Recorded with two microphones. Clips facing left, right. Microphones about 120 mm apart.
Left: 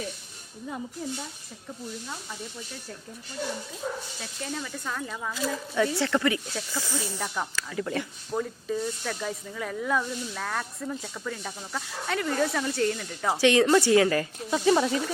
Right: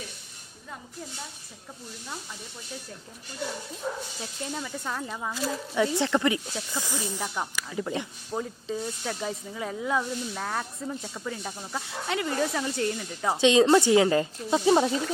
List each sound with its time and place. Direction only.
4.2 s speech: 20° right (ahead or behind)